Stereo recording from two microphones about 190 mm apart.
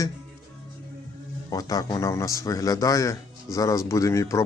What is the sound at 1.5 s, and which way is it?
A man's voice, 20° left (ahead or behind).